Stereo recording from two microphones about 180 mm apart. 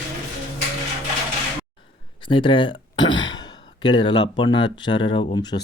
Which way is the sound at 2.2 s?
25° left (ahead or behind).